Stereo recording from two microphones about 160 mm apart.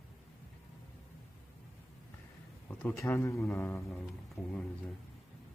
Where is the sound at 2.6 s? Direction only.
15° left (ahead or behind).